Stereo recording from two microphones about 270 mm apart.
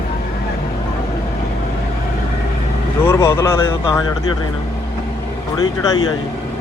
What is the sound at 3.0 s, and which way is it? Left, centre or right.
Speech, centre.